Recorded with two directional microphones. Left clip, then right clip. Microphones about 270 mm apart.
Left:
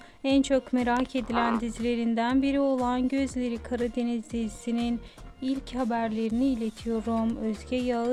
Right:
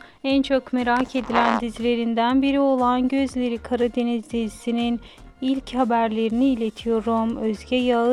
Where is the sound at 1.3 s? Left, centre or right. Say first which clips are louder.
Right 9 dB; right.